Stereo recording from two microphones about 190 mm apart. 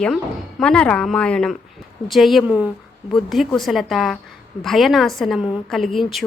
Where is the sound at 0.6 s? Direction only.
5° left (ahead or behind).